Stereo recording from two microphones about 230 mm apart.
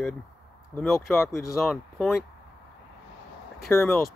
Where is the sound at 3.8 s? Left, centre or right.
Centre.